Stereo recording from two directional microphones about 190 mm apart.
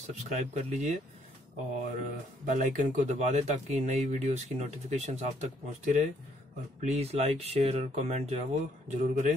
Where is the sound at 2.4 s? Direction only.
40° right (ahead or behind).